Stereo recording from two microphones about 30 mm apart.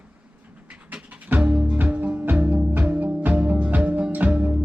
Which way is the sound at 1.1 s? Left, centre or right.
Right.